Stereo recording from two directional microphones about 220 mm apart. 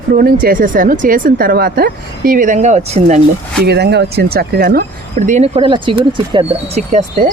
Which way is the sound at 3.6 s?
50° right (ahead or behind).